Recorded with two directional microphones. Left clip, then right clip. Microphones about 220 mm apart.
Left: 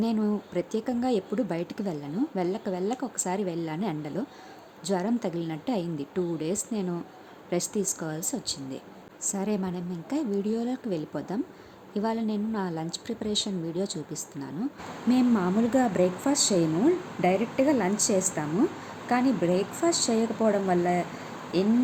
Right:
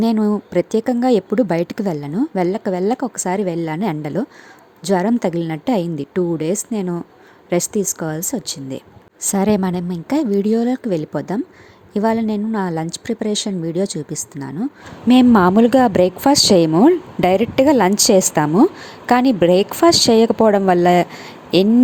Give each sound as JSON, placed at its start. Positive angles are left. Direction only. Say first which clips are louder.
{"t": 0.0, "sound": "a woman's voice", "louder": "right 11 dB", "side_deg": -35}